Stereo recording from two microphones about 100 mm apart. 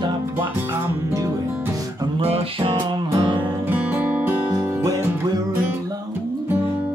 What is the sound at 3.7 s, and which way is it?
Music, 15° right (ahead or behind).